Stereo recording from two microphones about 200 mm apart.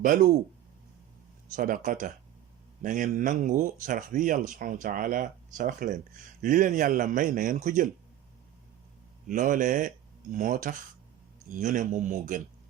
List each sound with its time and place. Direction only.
0.0 s speech: 40° right (ahead or behind)
1.5 s speech: 45° right (ahead or behind)
9.2 s speech: 40° right (ahead or behind)